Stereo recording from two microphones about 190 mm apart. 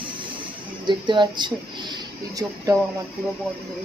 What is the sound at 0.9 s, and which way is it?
Speech, 25° right (ahead or behind).